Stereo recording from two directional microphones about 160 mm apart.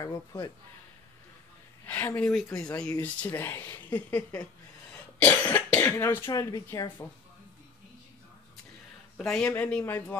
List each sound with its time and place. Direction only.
0.0 s speech: 20° left (ahead or behind)
1.9 s speech: 10° left (ahead or behind)
9.1 s speech: 5° left (ahead or behind)